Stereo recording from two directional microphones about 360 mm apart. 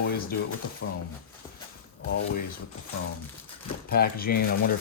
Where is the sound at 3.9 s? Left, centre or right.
Left.